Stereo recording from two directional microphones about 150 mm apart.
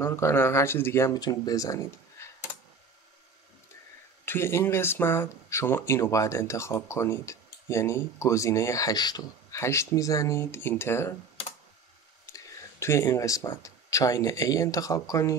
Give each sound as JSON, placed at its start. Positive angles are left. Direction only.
{"t": 0.0, "sound": "speech", "side_deg": 15}
{"t": 4.3, "sound": "speech", "side_deg": 15}
{"t": 12.3, "sound": "speech", "side_deg": 20}